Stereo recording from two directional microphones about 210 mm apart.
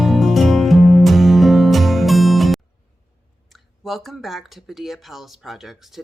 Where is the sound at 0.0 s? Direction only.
Centre (ahead or behind).